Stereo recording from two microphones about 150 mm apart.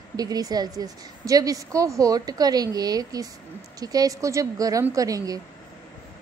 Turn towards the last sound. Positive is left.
turn(degrees=-25)  # may be behind; listen again after turning